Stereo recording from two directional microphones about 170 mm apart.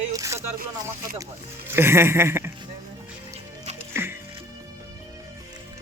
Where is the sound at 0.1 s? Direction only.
20° right (ahead or behind).